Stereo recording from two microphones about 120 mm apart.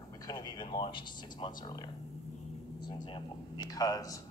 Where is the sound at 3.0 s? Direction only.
40° left (ahead or behind).